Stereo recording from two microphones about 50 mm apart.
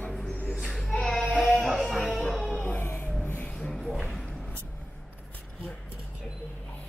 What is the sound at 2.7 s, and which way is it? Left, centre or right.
Music, left.